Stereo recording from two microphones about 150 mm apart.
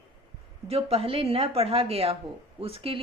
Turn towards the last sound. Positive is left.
turn(degrees=-40)  # may be behind; listen again after turning